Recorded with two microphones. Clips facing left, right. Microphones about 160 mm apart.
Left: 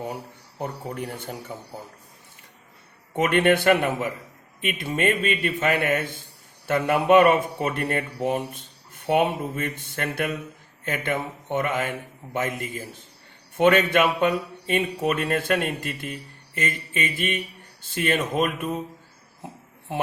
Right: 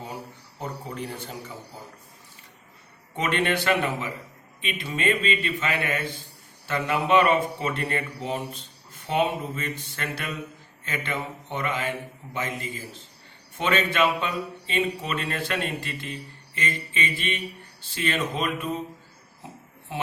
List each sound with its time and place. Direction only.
0.6 s speech: 55° left (ahead or behind)
3.2 s speech: 50° left (ahead or behind)